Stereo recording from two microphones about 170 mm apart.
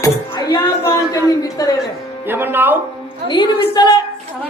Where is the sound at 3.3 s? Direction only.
25° left (ahead or behind).